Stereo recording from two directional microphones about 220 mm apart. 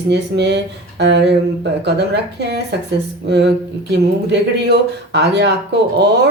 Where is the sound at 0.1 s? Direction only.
50° right (ahead or behind).